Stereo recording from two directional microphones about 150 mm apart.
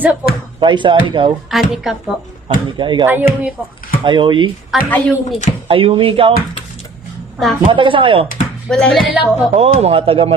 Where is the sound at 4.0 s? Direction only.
35° right (ahead or behind).